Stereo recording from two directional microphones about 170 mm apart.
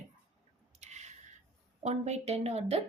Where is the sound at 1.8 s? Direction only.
40° right (ahead or behind).